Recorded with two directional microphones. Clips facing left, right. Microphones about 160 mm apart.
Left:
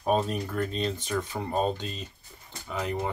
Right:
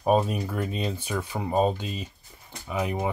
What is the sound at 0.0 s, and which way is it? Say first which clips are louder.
Speech: right 3 dB; 10° right (ahead or behind).